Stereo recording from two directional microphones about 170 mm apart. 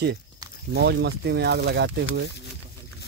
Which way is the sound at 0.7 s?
80° right.